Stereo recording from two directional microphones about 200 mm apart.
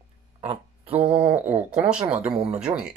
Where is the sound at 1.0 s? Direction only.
5° right (ahead or behind).